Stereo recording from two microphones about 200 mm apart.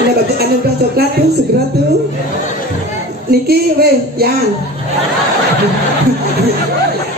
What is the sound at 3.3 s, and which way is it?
Speech, 50° right (ahead or behind).